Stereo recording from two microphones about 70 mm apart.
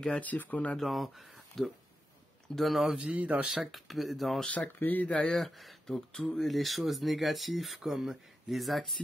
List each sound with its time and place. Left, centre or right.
0.2 s speech: left
0.7 s speech: centre
2.5 s speech: centre
3.0 s speech: right
3.4 s speech: centre
4.6 s speech: left
5.1 s speech: centre